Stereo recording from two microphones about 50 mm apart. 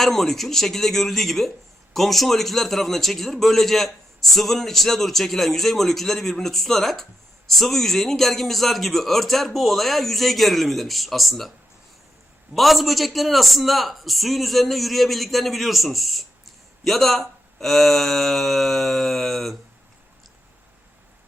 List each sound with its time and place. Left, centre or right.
0.0 s speech: centre
12.5 s speech: centre